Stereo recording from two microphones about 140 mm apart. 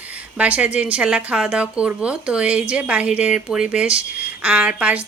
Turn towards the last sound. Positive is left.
turn(degrees=-10)  # may be behind; listen again after turning